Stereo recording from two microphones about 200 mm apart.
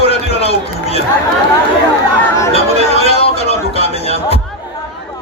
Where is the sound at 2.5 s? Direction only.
30° left (ahead or behind).